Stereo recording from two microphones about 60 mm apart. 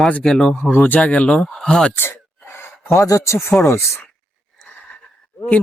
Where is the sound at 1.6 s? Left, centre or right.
Centre.